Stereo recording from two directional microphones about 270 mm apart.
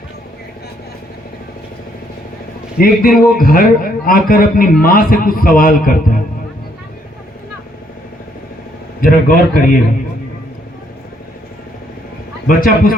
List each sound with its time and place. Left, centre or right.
2.7 s a man's voice: left
9.0 s a man's voice: left
12.5 s a man's voice: left